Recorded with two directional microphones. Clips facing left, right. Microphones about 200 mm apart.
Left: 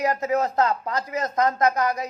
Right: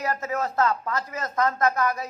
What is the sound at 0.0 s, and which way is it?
Speech, 20° left (ahead or behind).